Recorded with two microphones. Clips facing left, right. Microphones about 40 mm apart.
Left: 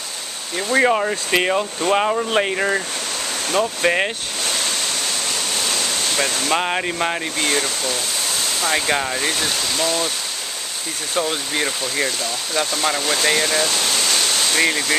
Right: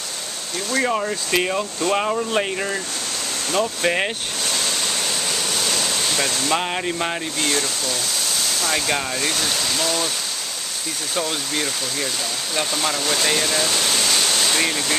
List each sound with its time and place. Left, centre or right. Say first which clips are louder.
0.7 s speech: left 5 dB; centre
3.5 s speech: left 2 dB; centre
5.6 s a sound: even; centre
6.4 s speech: left 2 dB; centre
11.1 s speech: left 3 dB; centre
13.7 s a sound: even; centre
14.7 s speech: left 3 dB; centre